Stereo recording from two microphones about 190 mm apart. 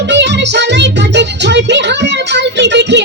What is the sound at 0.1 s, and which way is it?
Music, 65° right (ahead or behind).